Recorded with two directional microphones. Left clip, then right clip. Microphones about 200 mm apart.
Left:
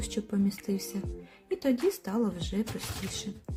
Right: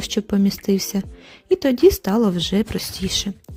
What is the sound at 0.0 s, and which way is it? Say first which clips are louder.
Speech: right 11 dB; 40° right (ahead or behind).